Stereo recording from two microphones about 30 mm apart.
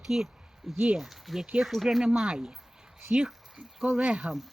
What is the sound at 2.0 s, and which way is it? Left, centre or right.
Speech, centre.